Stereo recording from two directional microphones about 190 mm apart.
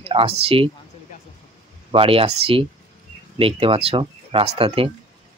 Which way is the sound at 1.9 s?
30° right (ahead or behind).